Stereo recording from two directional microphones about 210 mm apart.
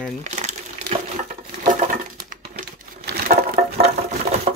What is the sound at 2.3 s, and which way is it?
Crumpling, 45° right (ahead or behind).